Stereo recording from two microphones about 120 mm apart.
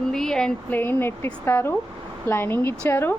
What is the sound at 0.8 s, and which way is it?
A woman's voice, 20° left (ahead or behind).